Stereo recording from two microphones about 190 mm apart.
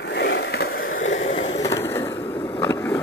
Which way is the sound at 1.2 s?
35° left (ahead or behind).